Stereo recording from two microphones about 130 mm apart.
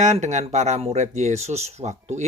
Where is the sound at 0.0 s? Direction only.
65° right (ahead or behind).